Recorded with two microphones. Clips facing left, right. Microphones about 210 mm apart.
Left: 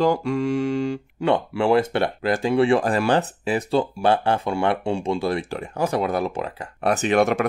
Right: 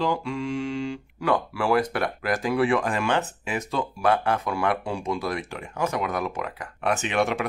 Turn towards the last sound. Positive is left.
turn(degrees=45)  # may be behind; listen again after turning